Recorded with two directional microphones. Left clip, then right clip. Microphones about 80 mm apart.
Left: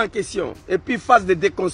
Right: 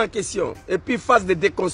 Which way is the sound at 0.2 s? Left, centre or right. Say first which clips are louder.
Even; right.